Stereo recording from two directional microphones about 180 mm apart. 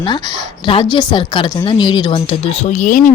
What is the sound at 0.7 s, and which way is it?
A woman's voice, 25° left (ahead or behind).